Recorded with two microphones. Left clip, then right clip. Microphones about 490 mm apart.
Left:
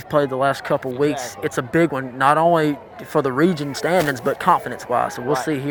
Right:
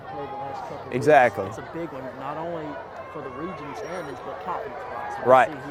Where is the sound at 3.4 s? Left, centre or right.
Left.